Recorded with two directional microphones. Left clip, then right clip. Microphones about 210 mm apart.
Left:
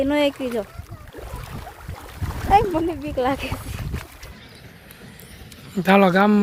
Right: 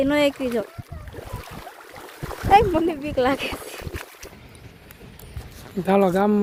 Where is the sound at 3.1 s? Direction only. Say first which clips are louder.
Right 1 dB; 10° right (ahead or behind).